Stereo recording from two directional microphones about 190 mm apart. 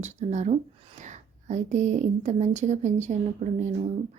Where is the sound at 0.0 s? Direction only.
35° right (ahead or behind).